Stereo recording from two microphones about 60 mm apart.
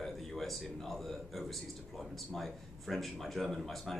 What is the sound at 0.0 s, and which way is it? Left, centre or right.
Speech, centre.